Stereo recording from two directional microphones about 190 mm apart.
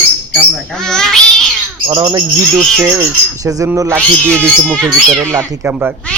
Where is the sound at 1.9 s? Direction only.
25° right (ahead or behind).